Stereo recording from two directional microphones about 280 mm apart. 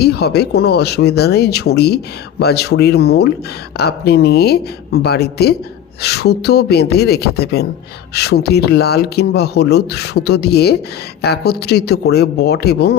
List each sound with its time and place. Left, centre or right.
0.0 s speech: left